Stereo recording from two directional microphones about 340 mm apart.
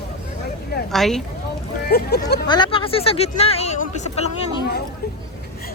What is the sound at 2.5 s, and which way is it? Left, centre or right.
Speech, centre.